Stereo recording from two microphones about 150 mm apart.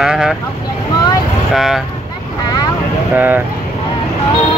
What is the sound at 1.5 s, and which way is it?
Speech, centre (ahead or behind).